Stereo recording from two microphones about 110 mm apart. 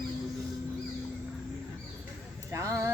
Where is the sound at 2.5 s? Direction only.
30° right (ahead or behind).